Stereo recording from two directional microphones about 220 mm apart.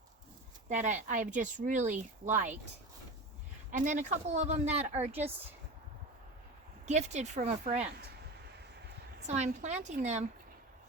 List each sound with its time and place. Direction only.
0.7 s speech: 35° right (ahead or behind)
3.7 s speech: 35° right (ahead or behind)
6.8 s speech: 30° right (ahead or behind)
9.2 s speech: 30° right (ahead or behind)